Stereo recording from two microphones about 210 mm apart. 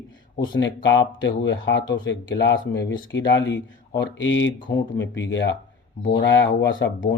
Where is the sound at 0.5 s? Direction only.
60° left (ahead or behind).